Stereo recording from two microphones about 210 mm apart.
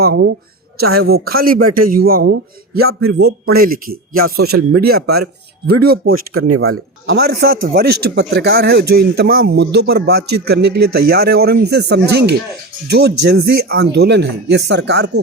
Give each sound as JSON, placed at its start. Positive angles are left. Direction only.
{"t": 0.0, "sound": "a man's voice", "side_deg": -50}
{"t": 6.1, "sound": "speech", "side_deg": -85}
{"t": 7.2, "sound": "a man's voice", "side_deg": -50}